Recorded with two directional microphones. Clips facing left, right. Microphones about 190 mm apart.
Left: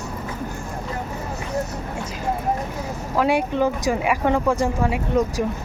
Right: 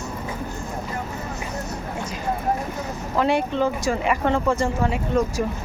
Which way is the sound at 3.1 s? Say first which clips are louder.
Left 1 dB; 10° left (ahead or behind).